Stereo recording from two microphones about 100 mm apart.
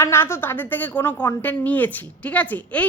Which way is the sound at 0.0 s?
25° left (ahead or behind).